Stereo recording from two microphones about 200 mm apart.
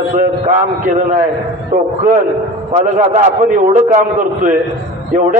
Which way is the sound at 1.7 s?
40° right (ahead or behind).